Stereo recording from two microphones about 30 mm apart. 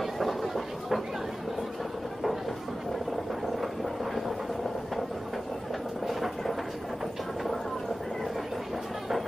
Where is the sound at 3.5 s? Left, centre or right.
Centre.